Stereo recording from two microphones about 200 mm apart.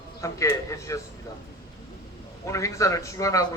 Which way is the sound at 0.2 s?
15° left (ahead or behind).